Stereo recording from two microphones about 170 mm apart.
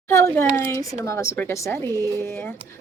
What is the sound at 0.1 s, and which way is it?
A woman's voice, 15° left (ahead or behind).